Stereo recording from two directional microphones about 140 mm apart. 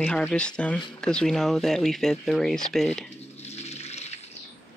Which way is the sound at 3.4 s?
50° left (ahead or behind).